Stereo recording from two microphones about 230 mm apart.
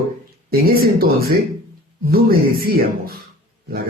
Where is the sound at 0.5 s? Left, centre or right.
Right.